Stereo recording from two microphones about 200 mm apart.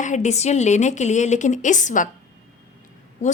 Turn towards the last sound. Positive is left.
turn(degrees=35)  # may be behind; listen again after turning